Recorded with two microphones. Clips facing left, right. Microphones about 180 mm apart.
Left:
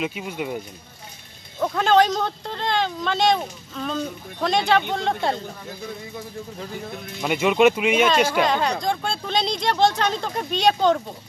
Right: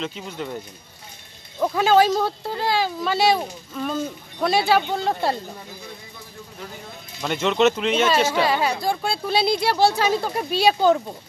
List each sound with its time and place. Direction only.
0.0 s speech: 10° left (ahead or behind)
1.6 s a woman's voice: 5° right (ahead or behind)
7.2 s speech: 10° left (ahead or behind)
8.3 s speech: 5° right (ahead or behind)